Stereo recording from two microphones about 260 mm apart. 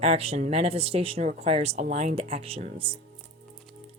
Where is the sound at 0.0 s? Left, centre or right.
Right.